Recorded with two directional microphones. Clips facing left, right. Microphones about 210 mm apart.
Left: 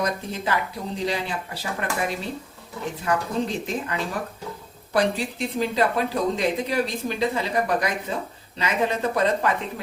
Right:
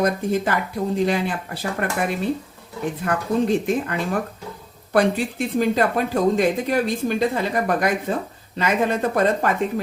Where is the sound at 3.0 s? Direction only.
55° right (ahead or behind).